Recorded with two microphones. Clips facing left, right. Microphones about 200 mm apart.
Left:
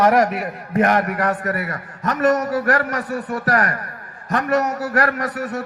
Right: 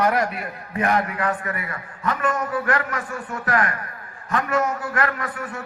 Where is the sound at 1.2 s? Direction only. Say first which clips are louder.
Left 4 dB; 40° left (ahead or behind).